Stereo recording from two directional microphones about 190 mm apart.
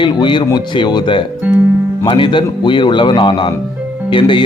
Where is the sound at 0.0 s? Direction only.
25° left (ahead or behind).